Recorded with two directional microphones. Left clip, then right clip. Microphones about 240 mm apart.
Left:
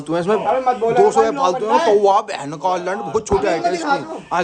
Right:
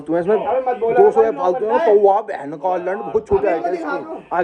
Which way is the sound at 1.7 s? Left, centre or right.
Left.